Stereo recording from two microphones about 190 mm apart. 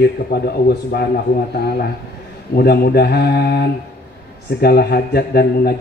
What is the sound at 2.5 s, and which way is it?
A man's voice, 55° left (ahead or behind).